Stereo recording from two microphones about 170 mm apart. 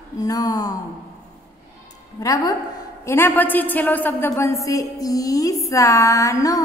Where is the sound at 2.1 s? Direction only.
20° left (ahead or behind).